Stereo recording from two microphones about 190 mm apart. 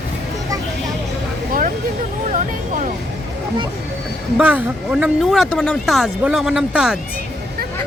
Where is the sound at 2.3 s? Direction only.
40° right (ahead or behind).